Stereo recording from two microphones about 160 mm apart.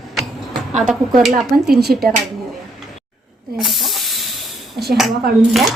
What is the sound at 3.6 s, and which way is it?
Hiss, centre (ahead or behind).